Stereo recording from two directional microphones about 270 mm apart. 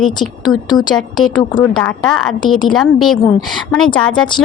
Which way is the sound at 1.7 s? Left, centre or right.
Centre.